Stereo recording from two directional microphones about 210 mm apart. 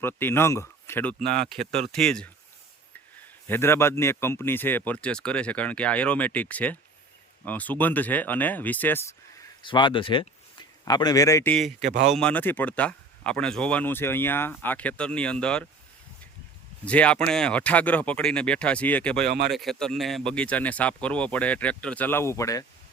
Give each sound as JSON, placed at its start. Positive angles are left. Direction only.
{"t": 0.0, "sound": "speech", "side_deg": 10}
{"t": 3.4, "sound": "speech", "side_deg": 10}
{"t": 9.6, "sound": "speech", "side_deg": 25}
{"t": 11.5, "sound": "speech", "side_deg": 0}
{"t": 11.9, "sound": "speech", "side_deg": -35}
{"t": 12.1, "sound": "speech", "side_deg": 5}
{"t": 16.8, "sound": "speech", "side_deg": 5}